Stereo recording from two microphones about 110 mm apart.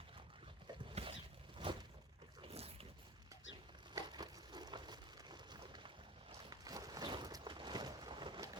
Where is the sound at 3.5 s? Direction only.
45° right (ahead or behind).